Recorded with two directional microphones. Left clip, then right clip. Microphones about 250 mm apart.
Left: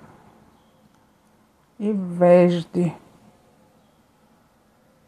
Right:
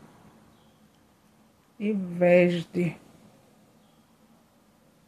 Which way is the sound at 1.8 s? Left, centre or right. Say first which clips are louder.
Left 5 dB; left.